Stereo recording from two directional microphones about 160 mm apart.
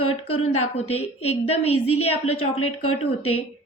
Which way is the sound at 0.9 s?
40° left (ahead or behind).